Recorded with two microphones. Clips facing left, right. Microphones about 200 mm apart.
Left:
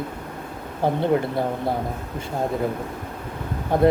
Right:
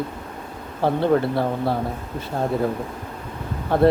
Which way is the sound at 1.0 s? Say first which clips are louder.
Right 3 dB; 20° left (ahead or behind).